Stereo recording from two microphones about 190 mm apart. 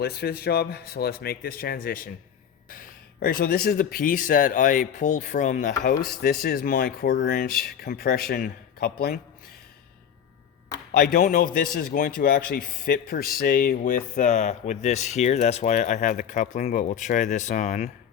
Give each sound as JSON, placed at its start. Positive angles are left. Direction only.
{"t": 0.0, "sound": "a man's voice", "side_deg": 55}
{"t": 10.9, "sound": "a man's voice", "side_deg": 55}